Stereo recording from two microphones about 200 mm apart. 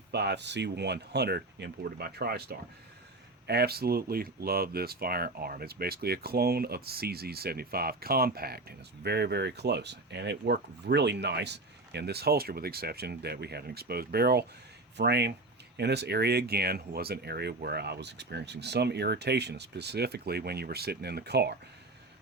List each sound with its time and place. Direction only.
0.1 s speech: 55° right (ahead or behind)